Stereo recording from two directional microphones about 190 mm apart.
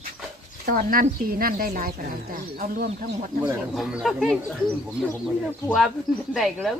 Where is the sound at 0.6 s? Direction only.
50° right (ahead or behind).